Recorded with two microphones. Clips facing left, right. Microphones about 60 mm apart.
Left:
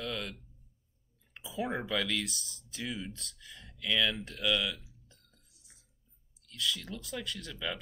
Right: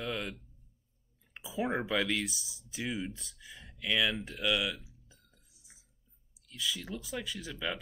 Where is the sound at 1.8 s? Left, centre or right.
Centre.